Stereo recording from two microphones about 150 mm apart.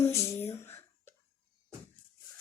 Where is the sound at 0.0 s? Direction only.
20° left (ahead or behind).